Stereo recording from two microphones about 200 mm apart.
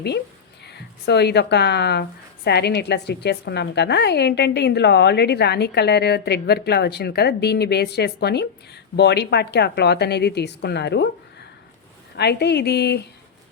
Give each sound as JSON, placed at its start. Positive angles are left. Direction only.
{"t": 0.6, "sound": "a woman's voice", "side_deg": 55}
{"t": 12.1, "sound": "a woman's voice", "side_deg": 55}